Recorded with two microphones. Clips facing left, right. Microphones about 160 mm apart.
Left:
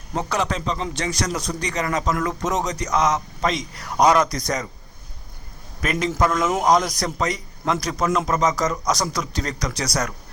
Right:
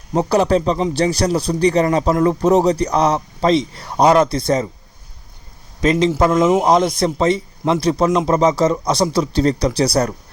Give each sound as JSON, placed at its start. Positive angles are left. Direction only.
{"t": 0.1, "sound": "speech", "side_deg": -35}
{"t": 5.8, "sound": "speech", "side_deg": -25}